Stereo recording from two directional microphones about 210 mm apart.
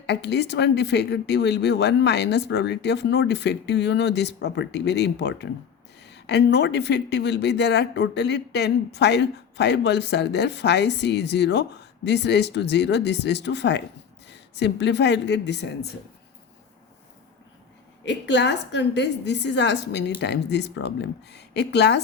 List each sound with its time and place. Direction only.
0.0 s a woman's voice: 55° left (ahead or behind)
18.0 s speech: 55° left (ahead or behind)